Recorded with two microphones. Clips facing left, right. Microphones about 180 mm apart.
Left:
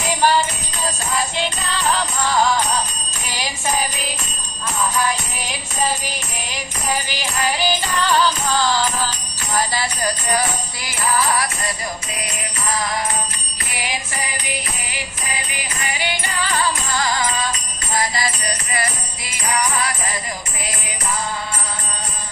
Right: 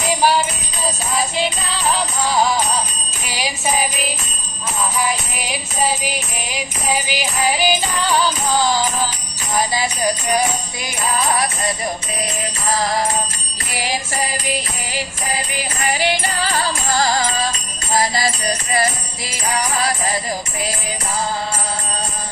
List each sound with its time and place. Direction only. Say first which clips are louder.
0.2 s music: even; 10° right (ahead or behind)
1.9 s music: right 1 dB; 10° right (ahead or behind)
4.9 s music: even; 10° right (ahead or behind)
12.7 s music: right 4 dB; 35° right (ahead or behind)